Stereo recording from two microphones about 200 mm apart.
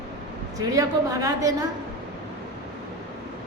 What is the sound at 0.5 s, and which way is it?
A woman's voice, 15° right (ahead or behind).